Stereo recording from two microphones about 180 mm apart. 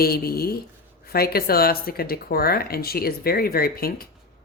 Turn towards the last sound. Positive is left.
turn(degrees=55)  # may be behind; listen again after turning